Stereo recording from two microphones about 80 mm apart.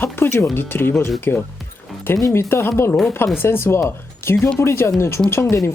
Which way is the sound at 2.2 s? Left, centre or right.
Left.